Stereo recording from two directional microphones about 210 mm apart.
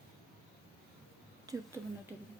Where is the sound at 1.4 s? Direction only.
15° right (ahead or behind).